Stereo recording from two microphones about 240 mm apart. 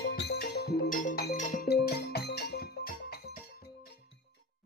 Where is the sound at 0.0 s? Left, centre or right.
Left.